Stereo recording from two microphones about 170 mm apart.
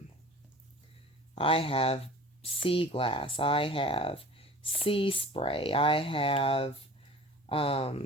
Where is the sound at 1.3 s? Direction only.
35° left (ahead or behind).